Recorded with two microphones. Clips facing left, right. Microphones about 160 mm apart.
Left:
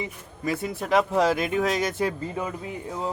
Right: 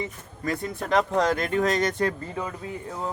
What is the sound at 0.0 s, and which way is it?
Speech, 5° left (ahead or behind).